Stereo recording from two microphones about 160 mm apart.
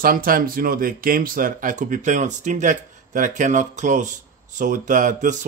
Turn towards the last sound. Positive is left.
turn(degrees=-50)  # may be behind; listen again after turning